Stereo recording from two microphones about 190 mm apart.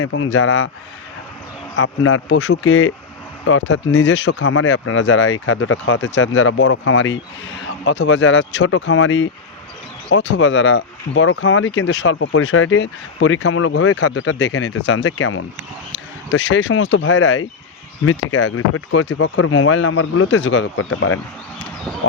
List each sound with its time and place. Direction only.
0.0 s speech: 85° left
1.7 s speech: 85° left
15.9 s speech: 80° left